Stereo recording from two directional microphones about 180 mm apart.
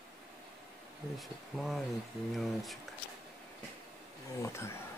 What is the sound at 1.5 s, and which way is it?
Speech, 5° right (ahead or behind).